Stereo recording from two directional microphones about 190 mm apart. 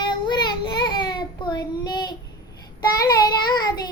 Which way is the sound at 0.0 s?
25° left (ahead or behind).